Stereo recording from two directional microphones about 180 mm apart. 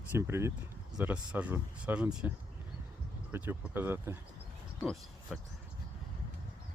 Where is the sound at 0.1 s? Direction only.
15° right (ahead or behind).